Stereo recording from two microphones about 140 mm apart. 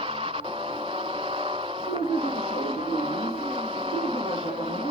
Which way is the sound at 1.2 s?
40° right (ahead or behind).